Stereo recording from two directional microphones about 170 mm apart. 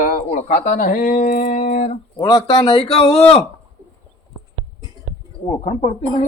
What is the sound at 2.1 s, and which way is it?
Speech, 25° left (ahead or behind).